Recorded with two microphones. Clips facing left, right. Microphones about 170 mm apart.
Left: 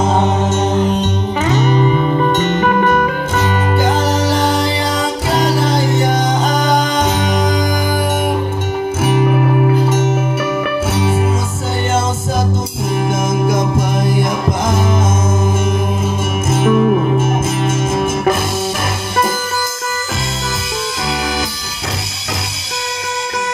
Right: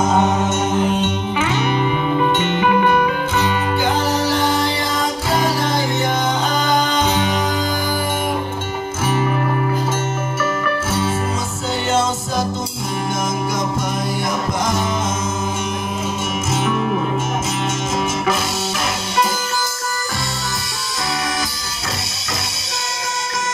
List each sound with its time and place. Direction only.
0.0 s music: 30° left (ahead or behind)
5.4 s music: 60° left (ahead or behind)
6.0 s music: 40° left (ahead or behind)
9.8 s music: 65° left (ahead or behind)
13.1 s music: 55° left (ahead or behind)
16.4 s music: 50° left (ahead or behind)